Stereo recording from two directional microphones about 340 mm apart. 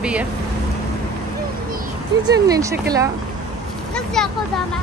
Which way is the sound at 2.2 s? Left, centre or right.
Centre.